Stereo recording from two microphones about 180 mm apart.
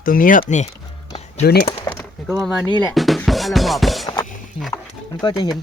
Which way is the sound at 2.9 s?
Centre (ahead or behind).